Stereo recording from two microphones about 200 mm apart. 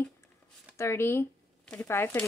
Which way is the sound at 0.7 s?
15° left (ahead or behind).